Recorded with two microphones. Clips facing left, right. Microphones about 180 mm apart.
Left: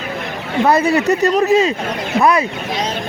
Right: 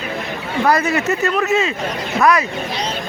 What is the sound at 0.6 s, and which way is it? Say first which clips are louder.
Speech: left 3 dB; 30° left (ahead or behind).